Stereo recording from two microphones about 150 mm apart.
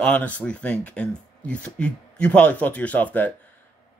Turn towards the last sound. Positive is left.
turn(degrees=10)  # may be behind; listen again after turning